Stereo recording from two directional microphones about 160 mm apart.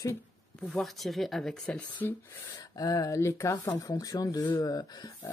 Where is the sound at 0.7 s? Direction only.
Centre (ahead or behind).